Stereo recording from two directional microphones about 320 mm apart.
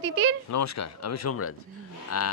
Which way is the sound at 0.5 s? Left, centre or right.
Left.